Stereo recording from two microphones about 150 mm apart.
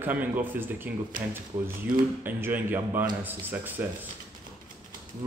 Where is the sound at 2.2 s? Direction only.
15° right (ahead or behind).